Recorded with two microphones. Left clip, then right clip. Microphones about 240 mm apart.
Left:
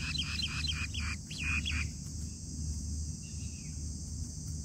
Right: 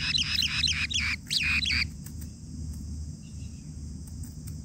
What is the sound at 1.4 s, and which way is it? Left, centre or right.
Bird, centre.